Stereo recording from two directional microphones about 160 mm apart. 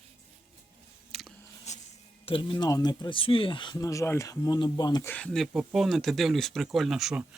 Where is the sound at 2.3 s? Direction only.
30° left (ahead or behind).